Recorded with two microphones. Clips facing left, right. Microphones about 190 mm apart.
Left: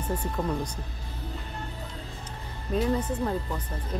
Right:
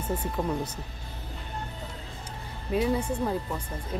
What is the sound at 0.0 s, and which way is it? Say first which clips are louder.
Speech: even; 10° right (ahead or behind).